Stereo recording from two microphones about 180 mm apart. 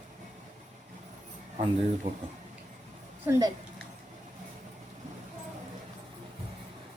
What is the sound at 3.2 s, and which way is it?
Speech, 15° right (ahead or behind).